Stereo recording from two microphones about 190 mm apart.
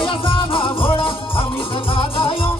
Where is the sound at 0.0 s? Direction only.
25° left (ahead or behind).